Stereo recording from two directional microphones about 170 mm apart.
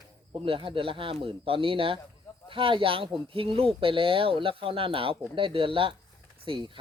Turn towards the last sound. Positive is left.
turn(degrees=-30)  # may be behind; listen again after turning